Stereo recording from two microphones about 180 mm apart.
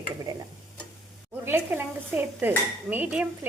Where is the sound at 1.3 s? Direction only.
10° right (ahead or behind).